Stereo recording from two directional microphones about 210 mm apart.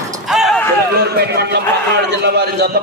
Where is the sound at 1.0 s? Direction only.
50° right (ahead or behind).